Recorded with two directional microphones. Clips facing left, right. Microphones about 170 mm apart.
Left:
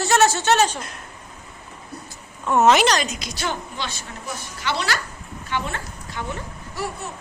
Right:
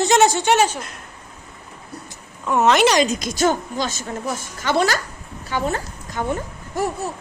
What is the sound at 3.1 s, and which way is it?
A woman's voice, 45° right (ahead or behind).